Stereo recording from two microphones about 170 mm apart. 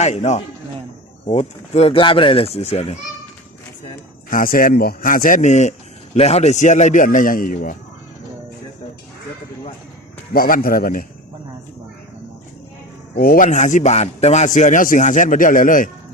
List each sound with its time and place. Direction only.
0.0 s speech: 40° left (ahead or behind)
4.3 s a man's voice: 55° left (ahead or behind)
10.3 s speech: 60° left (ahead or behind)
13.1 s a man's voice: 60° left (ahead or behind)